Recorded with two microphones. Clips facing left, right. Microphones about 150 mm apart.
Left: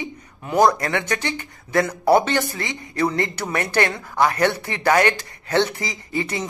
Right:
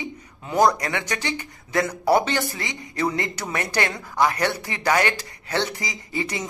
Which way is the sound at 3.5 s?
55° left (ahead or behind).